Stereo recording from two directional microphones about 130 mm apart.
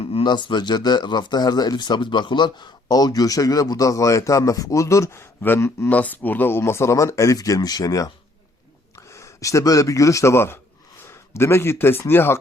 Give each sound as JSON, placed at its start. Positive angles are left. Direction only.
{"t": 0.0, "sound": "speech", "side_deg": 40}